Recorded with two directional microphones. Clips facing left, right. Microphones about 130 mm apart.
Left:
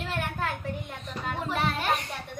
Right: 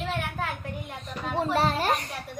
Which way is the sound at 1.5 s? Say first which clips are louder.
Right 2 dB; 35° right (ahead or behind).